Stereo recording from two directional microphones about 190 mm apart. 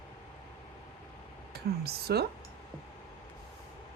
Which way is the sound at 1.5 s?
55° right (ahead or behind).